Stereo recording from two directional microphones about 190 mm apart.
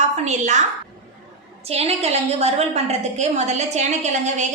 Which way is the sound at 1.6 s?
35° right (ahead or behind).